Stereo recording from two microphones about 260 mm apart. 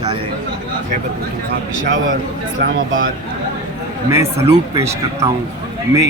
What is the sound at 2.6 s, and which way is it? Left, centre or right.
Speech, right.